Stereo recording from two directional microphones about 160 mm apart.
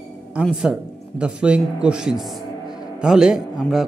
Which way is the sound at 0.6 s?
5° right (ahead or behind).